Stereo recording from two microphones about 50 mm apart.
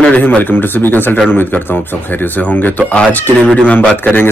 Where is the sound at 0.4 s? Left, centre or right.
Left.